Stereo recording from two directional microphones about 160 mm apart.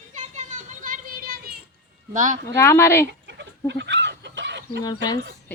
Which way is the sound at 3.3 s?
90° right.